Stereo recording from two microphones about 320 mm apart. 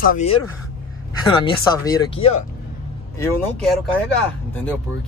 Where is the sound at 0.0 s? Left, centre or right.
Left.